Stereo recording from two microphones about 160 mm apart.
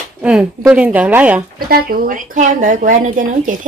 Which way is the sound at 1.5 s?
70° right (ahead or behind).